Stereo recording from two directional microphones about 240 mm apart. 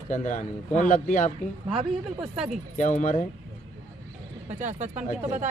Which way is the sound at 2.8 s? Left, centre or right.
Left.